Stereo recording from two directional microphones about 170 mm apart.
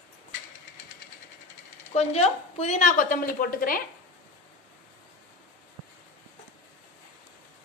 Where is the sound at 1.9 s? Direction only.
40° left (ahead or behind); by 3.8 s 60° left (ahead or behind).